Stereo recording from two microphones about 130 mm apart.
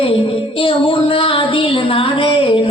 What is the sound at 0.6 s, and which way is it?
Child singing, 45° left (ahead or behind).